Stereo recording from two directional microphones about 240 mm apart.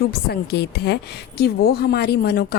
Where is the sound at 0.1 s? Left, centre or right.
Left.